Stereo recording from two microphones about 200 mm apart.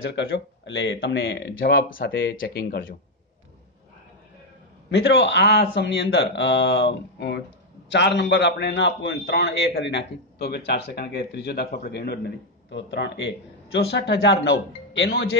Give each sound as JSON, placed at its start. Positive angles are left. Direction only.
{"t": 0.0, "sound": "a man's voice", "side_deg": 65}
{"t": 1.6, "sound": "speech", "side_deg": 45}
{"t": 4.9, "sound": "a man's voice", "side_deg": 55}